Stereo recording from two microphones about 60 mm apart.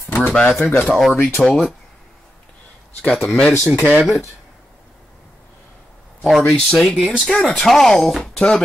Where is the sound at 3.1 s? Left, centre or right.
Centre.